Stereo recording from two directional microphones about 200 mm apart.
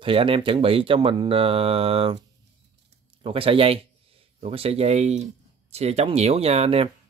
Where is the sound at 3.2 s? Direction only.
25° right (ahead or behind).